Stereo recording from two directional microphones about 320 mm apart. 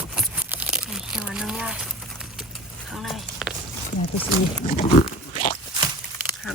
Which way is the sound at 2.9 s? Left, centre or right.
Centre.